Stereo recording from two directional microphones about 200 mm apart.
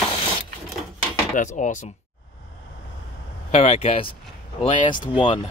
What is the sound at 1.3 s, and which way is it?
Speech, 40° left (ahead or behind).